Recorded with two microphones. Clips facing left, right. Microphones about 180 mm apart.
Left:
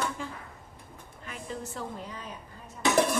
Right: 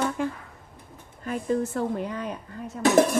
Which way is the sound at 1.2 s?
45° right (ahead or behind).